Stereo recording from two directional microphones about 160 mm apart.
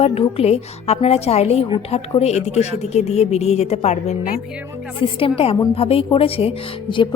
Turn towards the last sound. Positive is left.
turn(degrees=35)  # may be behind; listen again after turning